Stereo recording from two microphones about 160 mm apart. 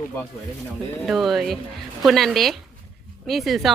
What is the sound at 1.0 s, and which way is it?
Speech, centre (ahead or behind).